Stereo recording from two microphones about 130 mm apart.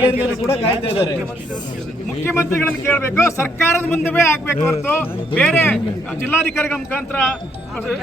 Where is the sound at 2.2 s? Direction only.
20° left (ahead or behind).